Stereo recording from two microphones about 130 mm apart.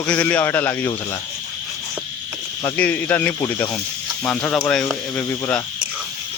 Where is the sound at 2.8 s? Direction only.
10° left (ahead or behind).